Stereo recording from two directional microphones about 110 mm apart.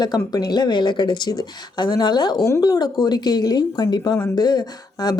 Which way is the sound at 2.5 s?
30° left (ahead or behind).